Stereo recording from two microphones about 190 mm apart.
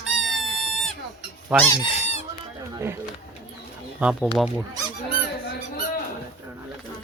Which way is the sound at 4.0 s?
5° right (ahead or behind).